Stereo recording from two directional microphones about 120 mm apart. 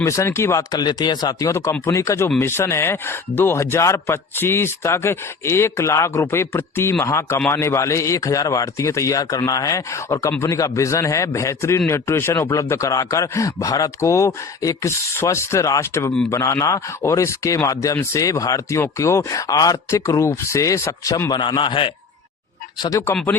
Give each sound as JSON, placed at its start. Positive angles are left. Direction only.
{"t": 0.0, "sound": "speech", "side_deg": 25}